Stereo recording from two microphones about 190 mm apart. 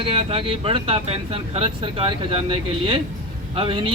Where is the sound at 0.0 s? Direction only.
30° right (ahead or behind).